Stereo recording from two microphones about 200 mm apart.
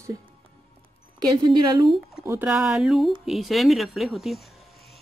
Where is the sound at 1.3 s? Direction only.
20° right (ahead or behind).